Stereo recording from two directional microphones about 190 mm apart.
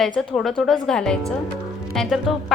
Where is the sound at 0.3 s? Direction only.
Centre (ahead or behind).